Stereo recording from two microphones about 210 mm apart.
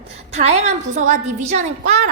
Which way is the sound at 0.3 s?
30° right (ahead or behind).